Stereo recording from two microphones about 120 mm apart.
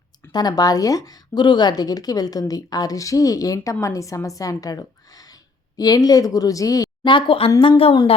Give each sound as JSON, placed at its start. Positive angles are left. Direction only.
{"t": 0.3, "sound": "speech", "side_deg": 35}
{"t": 7.1, "sound": "a woman's voice", "side_deg": 45}